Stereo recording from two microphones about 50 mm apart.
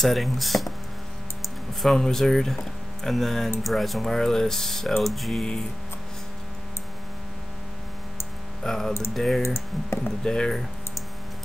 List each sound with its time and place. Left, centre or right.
0.0 s speech: centre
1.8 s speech: centre
8.6 s speech: centre
9.4 s speech: left
10.2 s speech: centre